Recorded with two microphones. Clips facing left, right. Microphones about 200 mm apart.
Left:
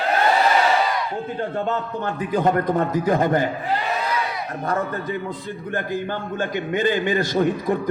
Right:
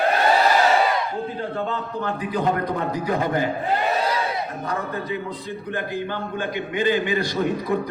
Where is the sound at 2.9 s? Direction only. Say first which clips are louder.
Left 4 dB; 45° left (ahead or behind).